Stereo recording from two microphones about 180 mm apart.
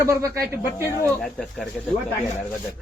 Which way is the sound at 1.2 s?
Centre (ahead or behind).